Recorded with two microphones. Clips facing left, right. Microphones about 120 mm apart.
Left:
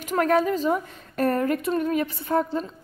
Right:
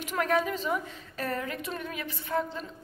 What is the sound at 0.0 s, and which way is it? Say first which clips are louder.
A woman's voice: left 6 dB; 45° left (ahead or behind).